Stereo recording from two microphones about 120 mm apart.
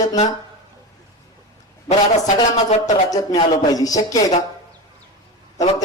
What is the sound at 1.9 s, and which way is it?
A man's voice, 75° left (ahead or behind).